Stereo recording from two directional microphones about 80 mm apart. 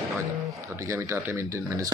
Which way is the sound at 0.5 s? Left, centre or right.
Right.